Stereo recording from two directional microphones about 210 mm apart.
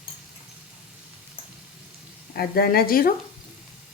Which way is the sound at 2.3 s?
45° left (ahead or behind).